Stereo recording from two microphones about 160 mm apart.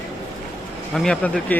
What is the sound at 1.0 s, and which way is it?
Speech, 5° left (ahead or behind).